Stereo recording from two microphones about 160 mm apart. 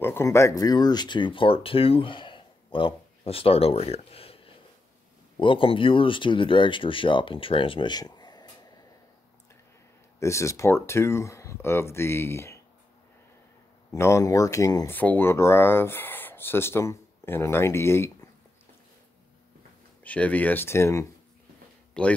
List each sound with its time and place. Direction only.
0.0 s speech: 15° left (ahead or behind); by 4.4 s 35° left (ahead or behind)
5.4 s speech: 35° left (ahead or behind)
10.2 s speech: 20° left (ahead or behind)
13.9 s speech: 15° left (ahead or behind)
20.0 s speech: 10° left (ahead or behind)
22.0 s speech: 5° left (ahead or behind)